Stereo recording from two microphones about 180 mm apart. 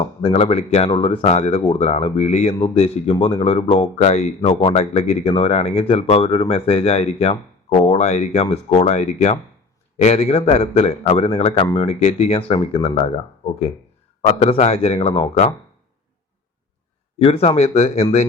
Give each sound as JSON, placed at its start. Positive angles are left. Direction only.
{"t": 0.2, "sound": "speech", "side_deg": 30}
{"t": 17.2, "sound": "speech", "side_deg": 35}